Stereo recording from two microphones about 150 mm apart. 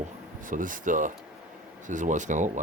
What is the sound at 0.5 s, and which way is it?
Speech, 60° right (ahead or behind).